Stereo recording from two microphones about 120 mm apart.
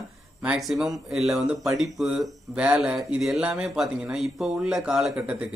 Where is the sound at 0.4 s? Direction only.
5° right (ahead or behind).